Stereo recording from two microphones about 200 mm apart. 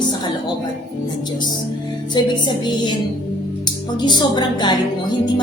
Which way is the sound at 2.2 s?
20° left (ahead or behind).